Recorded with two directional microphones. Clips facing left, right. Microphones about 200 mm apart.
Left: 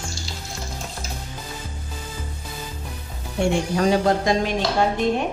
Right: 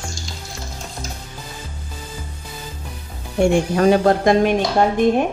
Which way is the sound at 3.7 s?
55° right (ahead or behind).